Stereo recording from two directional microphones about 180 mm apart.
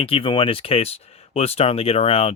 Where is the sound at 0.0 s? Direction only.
30° left (ahead or behind).